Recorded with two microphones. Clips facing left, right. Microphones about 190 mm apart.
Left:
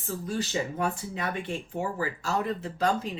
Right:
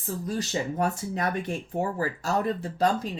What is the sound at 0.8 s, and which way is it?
Speech, 40° right (ahead or behind).